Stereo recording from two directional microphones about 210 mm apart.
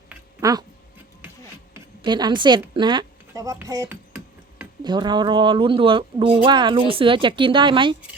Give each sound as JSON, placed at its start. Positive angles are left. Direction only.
{"t": 2.0, "sound": "a woman's voice", "side_deg": -20}